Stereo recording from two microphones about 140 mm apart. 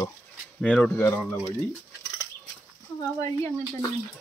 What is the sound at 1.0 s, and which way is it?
Speech, 20° left (ahead or behind).